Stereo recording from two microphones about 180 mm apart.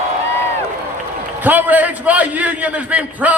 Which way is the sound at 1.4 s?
10° right (ahead or behind).